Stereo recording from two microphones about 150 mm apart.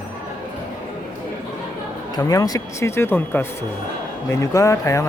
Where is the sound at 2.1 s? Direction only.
25° left (ahead or behind).